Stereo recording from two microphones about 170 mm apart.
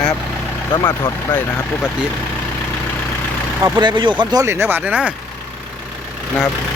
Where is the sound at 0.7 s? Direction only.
25° left (ahead or behind).